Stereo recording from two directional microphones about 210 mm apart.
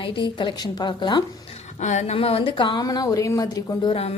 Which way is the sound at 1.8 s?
35° left (ahead or behind).